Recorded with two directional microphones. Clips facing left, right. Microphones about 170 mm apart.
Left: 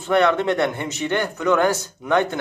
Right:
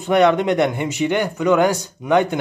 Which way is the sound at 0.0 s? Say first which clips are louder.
Right 3 dB; 15° right (ahead or behind).